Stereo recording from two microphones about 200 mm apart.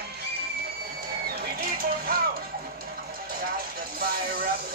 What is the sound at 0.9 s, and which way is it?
Music, 50° right (ahead or behind).